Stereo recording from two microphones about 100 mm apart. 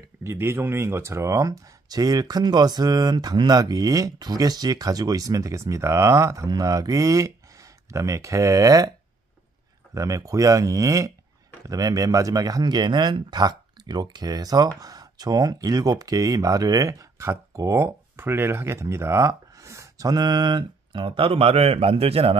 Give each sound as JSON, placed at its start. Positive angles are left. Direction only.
{"t": 0.2, "sound": "speech", "side_deg": -25}
{"t": 9.9, "sound": "speech", "side_deg": -35}